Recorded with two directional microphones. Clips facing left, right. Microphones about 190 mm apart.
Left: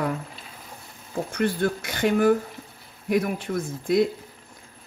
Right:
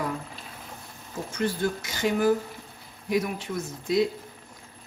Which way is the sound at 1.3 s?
60° left (ahead or behind).